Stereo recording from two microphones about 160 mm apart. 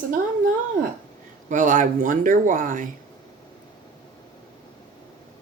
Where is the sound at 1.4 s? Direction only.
55° right (ahead or behind).